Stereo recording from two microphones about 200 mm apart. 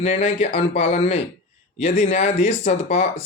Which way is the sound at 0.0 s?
35° left (ahead or behind).